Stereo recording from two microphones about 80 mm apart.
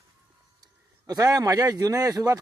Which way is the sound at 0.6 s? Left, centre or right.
Right.